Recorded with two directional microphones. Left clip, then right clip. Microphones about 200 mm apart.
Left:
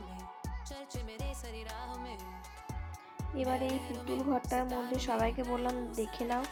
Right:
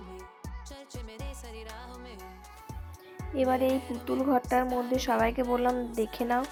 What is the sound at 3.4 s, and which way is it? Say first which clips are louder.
Speech: right 7 dB; 15° right (ahead or behind).